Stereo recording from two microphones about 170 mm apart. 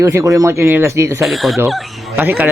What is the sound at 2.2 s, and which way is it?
Speech, 10° right (ahead or behind).